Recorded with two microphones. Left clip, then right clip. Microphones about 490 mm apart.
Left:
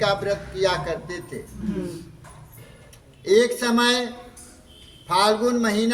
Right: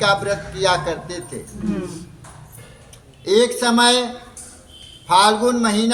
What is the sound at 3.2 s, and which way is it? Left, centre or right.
Speech, left.